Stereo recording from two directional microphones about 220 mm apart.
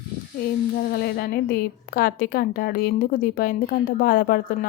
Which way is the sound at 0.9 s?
45° left (ahead or behind).